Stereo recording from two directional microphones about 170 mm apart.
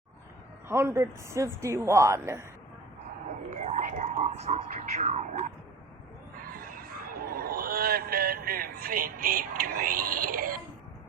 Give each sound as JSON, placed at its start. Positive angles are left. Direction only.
{"t": 0.7, "sound": "speech", "side_deg": -15}
{"t": 3.5, "sound": "speech", "side_deg": -45}
{"t": 6.4, "sound": "a sound", "side_deg": -55}